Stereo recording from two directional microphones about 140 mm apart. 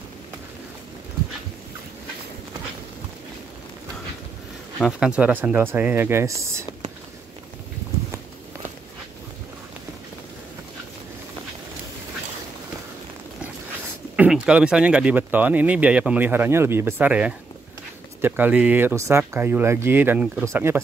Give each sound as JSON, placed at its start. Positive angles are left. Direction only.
{"t": 5.0, "sound": "speech", "side_deg": -10}
{"t": 14.1, "sound": "speech", "side_deg": -5}